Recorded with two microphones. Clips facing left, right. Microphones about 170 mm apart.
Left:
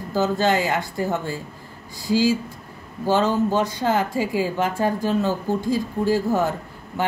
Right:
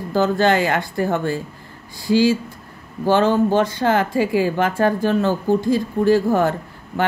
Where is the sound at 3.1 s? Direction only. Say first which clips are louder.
Right 4 dB; 65° right (ahead or behind).